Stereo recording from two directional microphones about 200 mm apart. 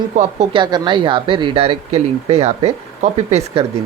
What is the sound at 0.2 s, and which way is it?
Speech, 35° right (ahead or behind).